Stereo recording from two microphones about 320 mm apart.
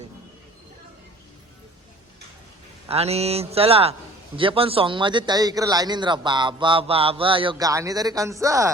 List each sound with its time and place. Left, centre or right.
2.9 s a man's voice: centre